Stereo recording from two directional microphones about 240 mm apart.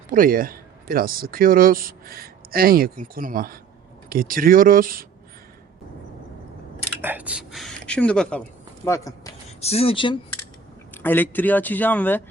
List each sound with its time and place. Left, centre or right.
0.1 s speech: right
7.0 s a woman's voice: centre
9.6 s speech: left
10.9 s a man's voice: centre